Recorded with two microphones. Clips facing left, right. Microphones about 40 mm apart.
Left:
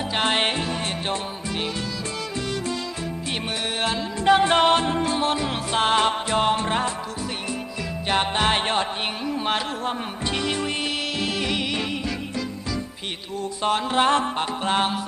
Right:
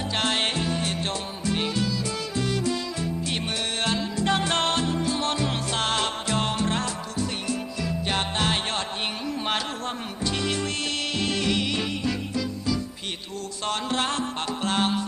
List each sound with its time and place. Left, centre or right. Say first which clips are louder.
0.1 s music: left 3 dB; centre
3.8 s music: left 1 dB; centre
4.3 s music: left 8 dB; centre
4.8 s music: left 3 dB; left
5.2 s music: left 3 dB; centre
10.2 s music: left 1 dB; left
13.6 s music: left 5 dB; centre
14.0 s music: left 11 dB; left
14.3 s music: left 3 dB; centre